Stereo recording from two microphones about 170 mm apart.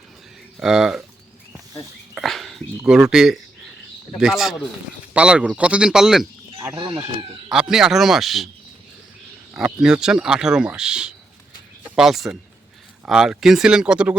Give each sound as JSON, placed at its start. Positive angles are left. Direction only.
{"t": 0.6, "sound": "speech", "side_deg": -5}
{"t": 2.1, "sound": "dog", "side_deg": 0}
{"t": 4.2, "sound": "speech", "side_deg": 0}
{"t": 6.7, "sound": "speech", "side_deg": -25}
{"t": 7.5, "sound": "speech", "side_deg": -5}
{"t": 9.6, "sound": "speech", "side_deg": -5}